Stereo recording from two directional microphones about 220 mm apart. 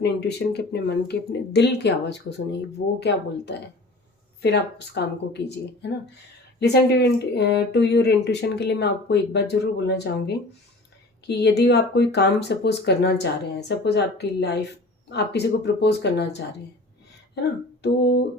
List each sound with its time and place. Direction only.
0.0 s speech: 50° left (ahead or behind)
17.8 s speech: 50° left (ahead or behind)